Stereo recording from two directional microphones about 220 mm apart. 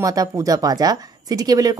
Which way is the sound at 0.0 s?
15° right (ahead or behind).